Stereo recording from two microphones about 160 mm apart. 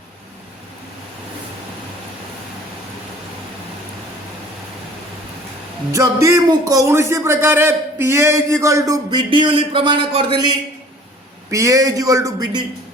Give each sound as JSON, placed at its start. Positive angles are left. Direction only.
{"t": 5.9, "sound": "a man's voice", "side_deg": -20}
{"t": 11.5, "sound": "a man's voice", "side_deg": -20}